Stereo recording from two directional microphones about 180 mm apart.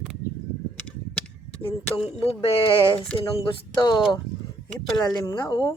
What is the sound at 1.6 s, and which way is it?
A woman's voice, 30° left (ahead or behind).